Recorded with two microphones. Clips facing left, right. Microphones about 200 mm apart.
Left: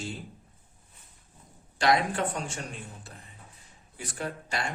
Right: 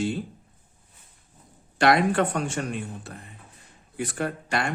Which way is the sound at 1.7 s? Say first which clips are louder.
Right 5 dB; 65° right (ahead or behind).